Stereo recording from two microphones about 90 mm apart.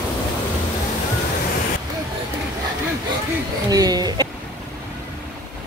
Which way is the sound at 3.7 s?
45° right (ahead or behind).